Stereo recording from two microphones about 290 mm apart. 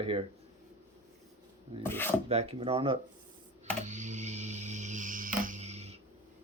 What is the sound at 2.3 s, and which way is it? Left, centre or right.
Speech, right.